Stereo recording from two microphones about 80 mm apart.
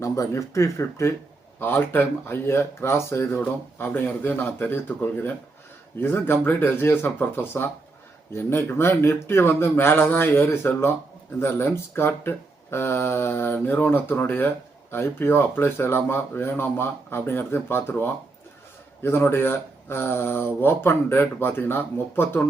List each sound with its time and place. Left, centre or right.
0.0 s speech: left
3.3 s speech: centre